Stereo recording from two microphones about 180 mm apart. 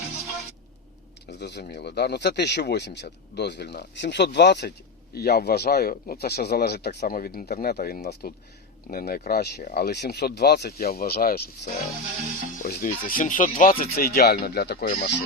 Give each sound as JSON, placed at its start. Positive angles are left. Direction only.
{"t": 1.3, "sound": "speech", "side_deg": 70}